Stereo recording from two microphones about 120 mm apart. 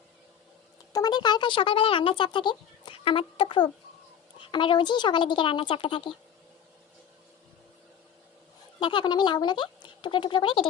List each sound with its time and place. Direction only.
0.9 s speech: 35° left (ahead or behind)
8.8 s speech: 40° left (ahead or behind)